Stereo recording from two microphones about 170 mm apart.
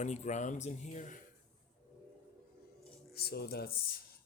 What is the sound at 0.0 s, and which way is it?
Speech, 45° left (ahead or behind).